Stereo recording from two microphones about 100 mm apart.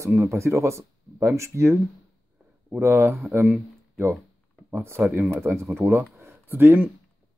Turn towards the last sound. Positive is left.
turn(degrees=-20)  # may be behind; listen again after turning